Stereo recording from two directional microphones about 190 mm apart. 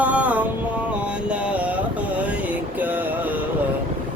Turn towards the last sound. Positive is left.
turn(degrees=-10)  # may be behind; listen again after turning